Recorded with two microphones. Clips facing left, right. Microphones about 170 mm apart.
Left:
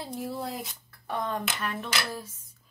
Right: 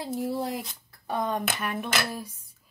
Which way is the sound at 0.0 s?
15° right (ahead or behind).